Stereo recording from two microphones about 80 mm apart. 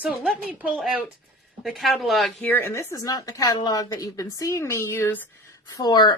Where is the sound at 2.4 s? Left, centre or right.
Left.